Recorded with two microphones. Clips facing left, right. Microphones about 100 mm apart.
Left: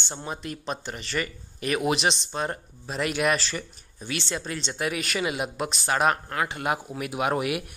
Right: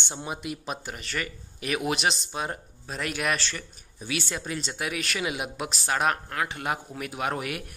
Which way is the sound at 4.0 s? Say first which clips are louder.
Left 1 dB; 10° right (ahead or behind).